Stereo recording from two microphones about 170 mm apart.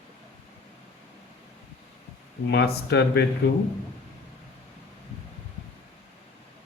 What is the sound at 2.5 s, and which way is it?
Speech, 75° left (ahead or behind).